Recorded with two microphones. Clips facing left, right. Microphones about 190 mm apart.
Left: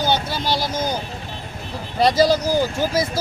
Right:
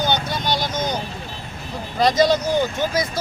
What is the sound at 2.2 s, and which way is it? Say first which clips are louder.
Speech: left 1 dB; 5° left (ahead or behind).